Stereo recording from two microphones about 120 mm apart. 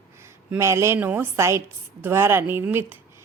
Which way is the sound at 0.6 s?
25° right (ahead or behind).